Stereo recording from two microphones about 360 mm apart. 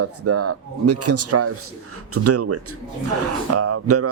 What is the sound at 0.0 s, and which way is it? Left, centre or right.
Speech, right.